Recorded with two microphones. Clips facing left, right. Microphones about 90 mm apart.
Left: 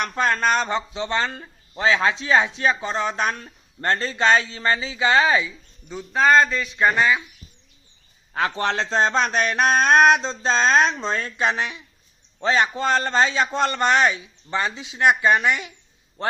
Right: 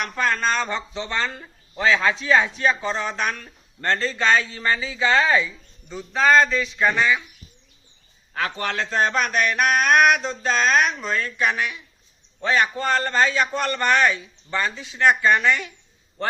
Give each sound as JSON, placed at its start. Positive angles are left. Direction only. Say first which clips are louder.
{"t": 0.0, "sound": "music", "louder": "left 2 dB", "side_deg": 25}
{"t": 5.9, "sound": "a sound", "louder": "left 1 dB", "side_deg": 5}
{"t": 8.3, "sound": "music", "louder": "left 3 dB", "side_deg": 25}